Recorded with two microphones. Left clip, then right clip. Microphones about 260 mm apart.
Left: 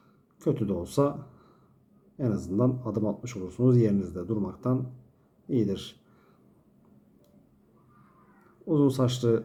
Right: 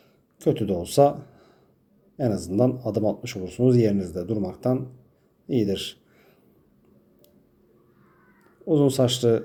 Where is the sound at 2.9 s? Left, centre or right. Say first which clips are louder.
Right 6 dB; centre.